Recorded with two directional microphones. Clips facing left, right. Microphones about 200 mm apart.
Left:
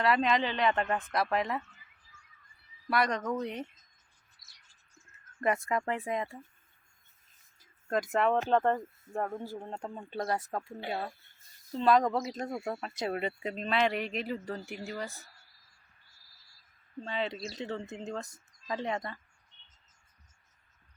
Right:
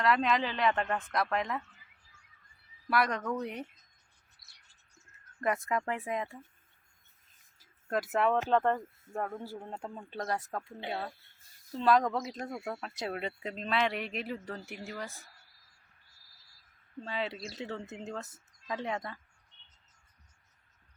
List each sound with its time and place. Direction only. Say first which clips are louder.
0.0 s speech: left 1 dB; centre (ahead or behind)
2.9 s speech: left 1 dB; 5° right (ahead or behind)
5.4 s speech: left 2 dB; centre (ahead or behind)
7.6 s a sound: left 2 dB; 5° right (ahead or behind)
8.4 s speech: left 1 dB; 5° left (ahead or behind)
9.2 s speech: left 2 dB; 15° left (ahead or behind)
9.6 s speech: left 2 dB; 5° right (ahead or behind)
10.0 s speech: left 3 dB; 10° left (ahead or behind)
17.0 s speech: left 2 dB; 5° right (ahead or behind)